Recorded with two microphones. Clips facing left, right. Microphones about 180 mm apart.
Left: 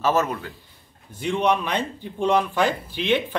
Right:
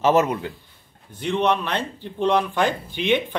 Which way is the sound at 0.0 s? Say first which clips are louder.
Right 4 dB; 20° right (ahead or behind).